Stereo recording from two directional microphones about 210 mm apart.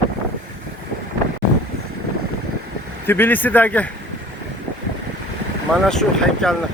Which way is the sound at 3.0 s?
10° left (ahead or behind).